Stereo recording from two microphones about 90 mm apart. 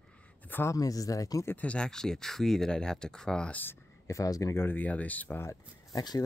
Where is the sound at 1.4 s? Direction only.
15° left (ahead or behind).